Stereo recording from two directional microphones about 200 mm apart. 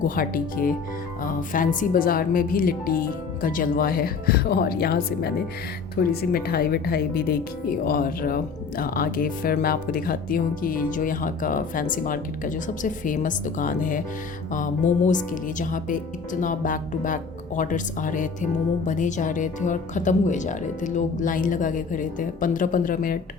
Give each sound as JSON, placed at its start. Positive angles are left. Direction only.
{"t": 0.2, "sound": "speech", "side_deg": 45}